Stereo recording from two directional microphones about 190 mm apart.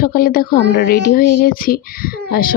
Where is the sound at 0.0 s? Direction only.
50° left (ahead or behind).